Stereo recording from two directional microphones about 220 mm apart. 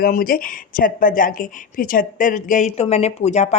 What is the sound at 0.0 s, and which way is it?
Speech, 40° left (ahead or behind).